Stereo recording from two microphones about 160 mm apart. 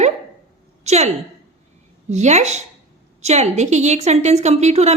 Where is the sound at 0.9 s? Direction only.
45° right (ahead or behind).